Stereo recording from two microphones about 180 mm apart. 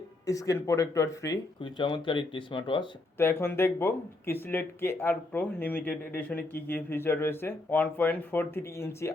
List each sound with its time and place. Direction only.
0.3 s speech: 20° left (ahead or behind)
3.2 s speech: 15° left (ahead or behind)